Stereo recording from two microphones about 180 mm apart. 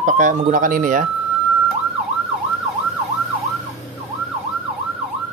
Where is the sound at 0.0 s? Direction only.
45° right (ahead or behind).